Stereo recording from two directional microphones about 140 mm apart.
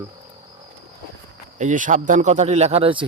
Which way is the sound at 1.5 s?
65° right (ahead or behind).